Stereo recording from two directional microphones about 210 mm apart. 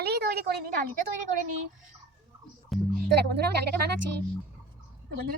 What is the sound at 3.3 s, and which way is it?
Speech, 50° right (ahead or behind).